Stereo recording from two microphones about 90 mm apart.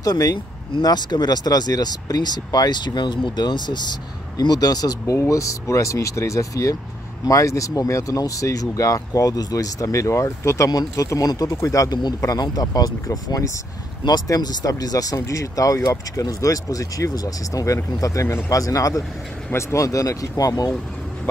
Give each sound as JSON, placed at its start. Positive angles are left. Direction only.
{"t": 0.0, "sound": "speech", "side_deg": 40}